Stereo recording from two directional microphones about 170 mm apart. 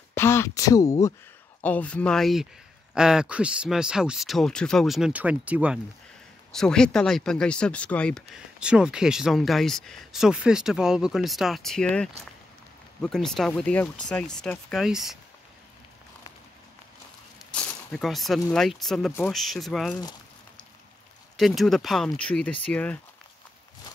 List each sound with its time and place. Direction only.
0.1 s speech: 15° left (ahead or behind)
1.6 s speech: 10° left (ahead or behind); by 5.8 s 10° right (ahead or behind)
6.5 s speech: 5° left (ahead or behind)
17.4 s speech: 5° left (ahead or behind)
21.4 s speech: centre (ahead or behind)